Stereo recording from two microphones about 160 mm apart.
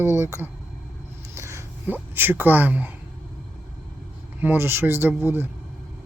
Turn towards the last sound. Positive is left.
turn(degrees=-10)  # may be behind; listen again after turning